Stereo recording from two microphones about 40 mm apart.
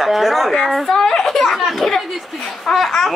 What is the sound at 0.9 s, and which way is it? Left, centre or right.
Speech, centre.